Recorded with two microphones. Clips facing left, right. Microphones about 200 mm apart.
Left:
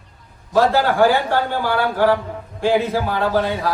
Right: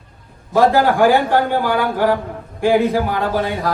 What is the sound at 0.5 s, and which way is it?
A man's voice, 15° right (ahead or behind).